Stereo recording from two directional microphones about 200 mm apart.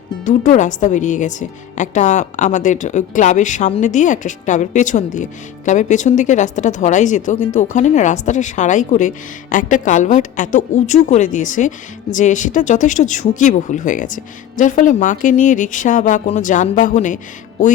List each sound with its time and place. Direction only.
0.3 s a woman's voice: 40° left (ahead or behind)